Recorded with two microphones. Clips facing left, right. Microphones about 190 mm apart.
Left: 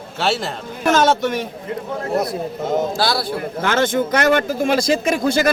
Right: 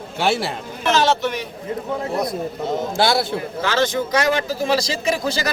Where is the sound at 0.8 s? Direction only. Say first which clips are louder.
Left 3 dB; 45° left (ahead or behind).